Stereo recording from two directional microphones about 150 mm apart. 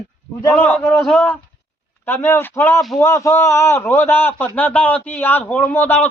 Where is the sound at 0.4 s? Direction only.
10° left (ahead or behind).